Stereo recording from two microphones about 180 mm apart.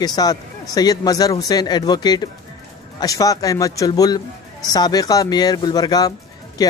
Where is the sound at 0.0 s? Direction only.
20° left (ahead or behind).